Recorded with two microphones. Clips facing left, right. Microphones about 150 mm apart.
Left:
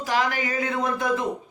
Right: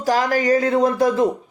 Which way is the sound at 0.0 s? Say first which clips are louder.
Right 6 dB; 40° right (ahead or behind).